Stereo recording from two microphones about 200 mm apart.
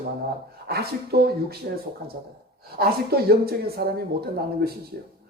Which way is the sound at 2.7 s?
50° right (ahead or behind).